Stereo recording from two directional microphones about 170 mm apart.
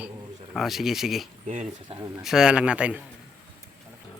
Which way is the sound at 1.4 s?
40° right (ahead or behind).